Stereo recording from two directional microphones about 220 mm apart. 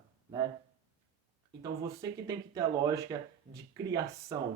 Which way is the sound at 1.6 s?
15° right (ahead or behind).